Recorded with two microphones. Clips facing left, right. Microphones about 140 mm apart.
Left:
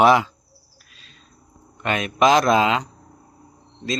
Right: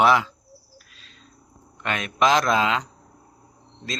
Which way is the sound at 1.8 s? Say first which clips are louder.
Left 4 dB; 15° left (ahead or behind).